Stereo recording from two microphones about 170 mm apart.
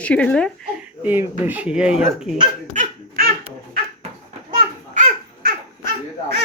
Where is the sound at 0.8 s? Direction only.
10° right (ahead or behind).